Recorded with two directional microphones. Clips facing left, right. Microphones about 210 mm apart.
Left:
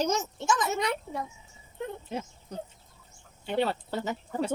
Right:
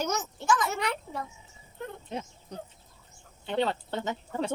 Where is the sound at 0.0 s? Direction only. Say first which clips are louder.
Left 3 dB; 25° left (ahead or behind).